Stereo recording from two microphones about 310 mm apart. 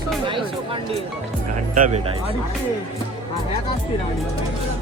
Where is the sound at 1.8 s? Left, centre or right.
Right.